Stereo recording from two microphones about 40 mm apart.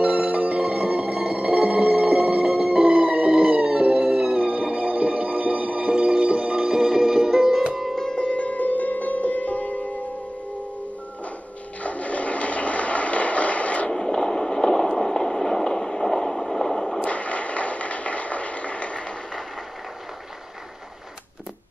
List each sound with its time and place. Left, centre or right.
0.0 s music: right
6.8 s music: centre
8.0 s music: centre
8.3 s music: left
11.8 s a sound: left
13.8 s train: centre
17.0 s a sound: left